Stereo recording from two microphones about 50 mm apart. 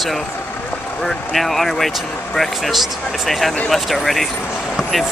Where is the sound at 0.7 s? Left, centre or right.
Left.